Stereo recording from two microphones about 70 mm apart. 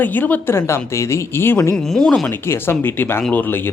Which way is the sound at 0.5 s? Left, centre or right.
Left.